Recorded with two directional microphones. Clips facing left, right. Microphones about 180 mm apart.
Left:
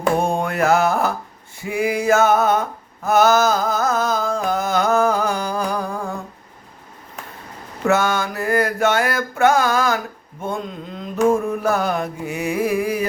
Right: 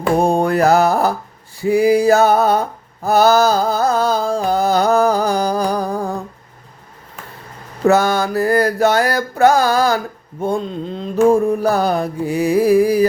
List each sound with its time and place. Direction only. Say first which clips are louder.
0.2 s mantra: right 5 dB; 35° right (ahead or behind)
7.9 s a sound: right 5 dB; 35° right (ahead or behind)
10.4 s mantra: right 7 dB; 30° right (ahead or behind)